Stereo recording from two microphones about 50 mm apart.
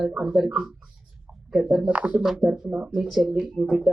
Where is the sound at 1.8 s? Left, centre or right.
Right.